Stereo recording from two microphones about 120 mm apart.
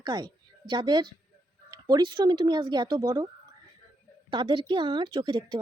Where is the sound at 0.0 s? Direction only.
35° right (ahead or behind).